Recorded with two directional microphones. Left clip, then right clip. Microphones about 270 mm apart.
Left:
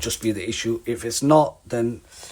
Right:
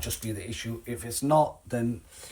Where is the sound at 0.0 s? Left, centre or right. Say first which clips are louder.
Left 11 dB; left.